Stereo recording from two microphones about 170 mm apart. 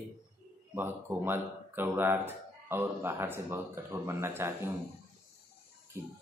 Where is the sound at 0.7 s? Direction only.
10° right (ahead or behind).